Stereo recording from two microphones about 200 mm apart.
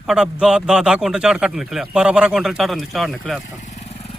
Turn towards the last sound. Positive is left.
turn(degrees=30)  # may be behind; listen again after turning